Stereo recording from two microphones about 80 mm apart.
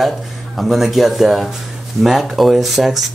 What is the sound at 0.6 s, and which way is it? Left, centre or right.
Speech, centre.